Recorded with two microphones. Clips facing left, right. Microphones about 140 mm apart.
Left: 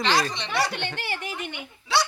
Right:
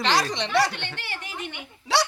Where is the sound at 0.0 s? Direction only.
80° right.